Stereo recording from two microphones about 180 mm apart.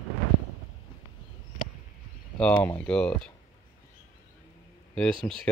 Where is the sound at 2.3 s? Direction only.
5° left (ahead or behind).